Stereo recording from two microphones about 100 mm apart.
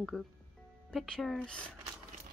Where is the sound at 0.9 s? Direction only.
10° left (ahead or behind).